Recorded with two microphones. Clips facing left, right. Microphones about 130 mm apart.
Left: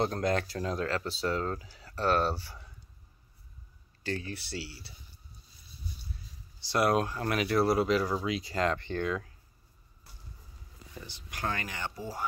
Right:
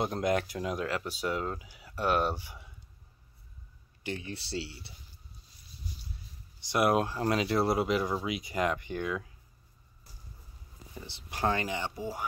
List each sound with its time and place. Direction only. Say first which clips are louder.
0.0 s speech: even; 15° right (ahead or behind)
4.0 s speech: left 2 dB; 20° right (ahead or behind)
6.6 s speech: even; 20° right (ahead or behind)
11.1 s speech: right 5 dB; 25° right (ahead or behind)